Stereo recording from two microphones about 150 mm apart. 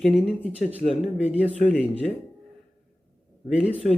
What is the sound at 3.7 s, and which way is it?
Speech, 40° left (ahead or behind).